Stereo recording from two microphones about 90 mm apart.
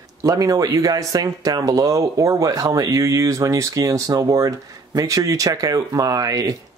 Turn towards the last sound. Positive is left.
turn(degrees=-40)  # may be behind; listen again after turning